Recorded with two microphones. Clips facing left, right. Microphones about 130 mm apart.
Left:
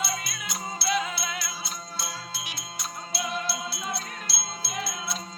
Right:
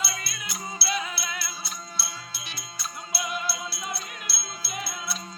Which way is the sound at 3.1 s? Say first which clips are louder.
Left 1 dB; 5° right (ahead or behind).